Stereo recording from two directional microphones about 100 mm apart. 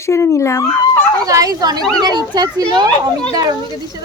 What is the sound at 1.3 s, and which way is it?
Speech, 35° right (ahead or behind).